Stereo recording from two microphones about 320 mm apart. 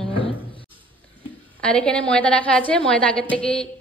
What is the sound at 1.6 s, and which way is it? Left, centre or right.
A woman's voice, centre.